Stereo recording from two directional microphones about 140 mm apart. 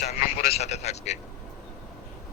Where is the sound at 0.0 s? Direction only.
55° left (ahead or behind).